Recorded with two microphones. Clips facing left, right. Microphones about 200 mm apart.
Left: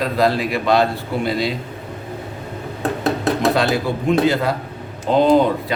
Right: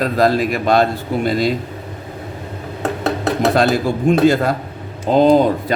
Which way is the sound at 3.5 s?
45° right (ahead or behind).